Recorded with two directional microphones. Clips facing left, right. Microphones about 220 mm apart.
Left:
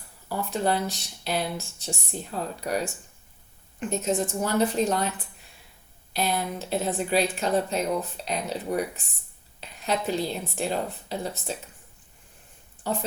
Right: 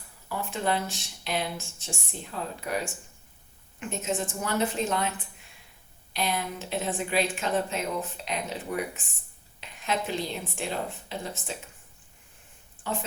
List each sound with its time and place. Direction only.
0.3 s speech: 35° left (ahead or behind)
6.1 s speech: 40° left (ahead or behind)
12.9 s speech: 35° left (ahead or behind)